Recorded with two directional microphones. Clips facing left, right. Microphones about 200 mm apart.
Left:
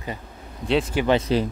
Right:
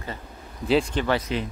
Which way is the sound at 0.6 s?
Centre (ahead or behind).